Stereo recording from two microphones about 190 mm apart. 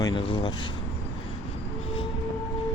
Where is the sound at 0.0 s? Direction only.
25° left (ahead or behind).